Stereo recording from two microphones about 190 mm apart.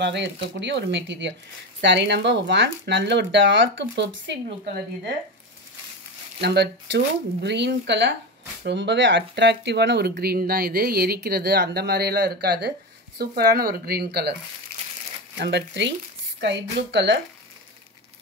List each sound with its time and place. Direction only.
0.0 s speech: 65° right (ahead or behind)
6.4 s speech: 60° right (ahead or behind)
15.3 s speech: 60° right (ahead or behind)